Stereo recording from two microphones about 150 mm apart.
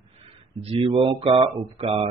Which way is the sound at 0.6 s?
35° right (ahead or behind).